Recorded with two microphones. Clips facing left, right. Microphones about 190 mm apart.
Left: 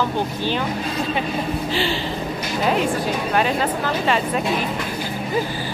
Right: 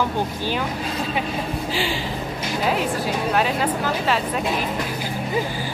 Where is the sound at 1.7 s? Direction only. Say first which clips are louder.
Left 2 dB; 10° right (ahead or behind).